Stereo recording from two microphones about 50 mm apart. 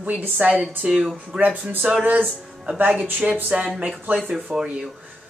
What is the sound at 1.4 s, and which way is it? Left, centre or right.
Speech, right.